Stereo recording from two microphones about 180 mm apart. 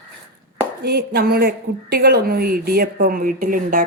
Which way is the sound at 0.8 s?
60° right (ahead or behind).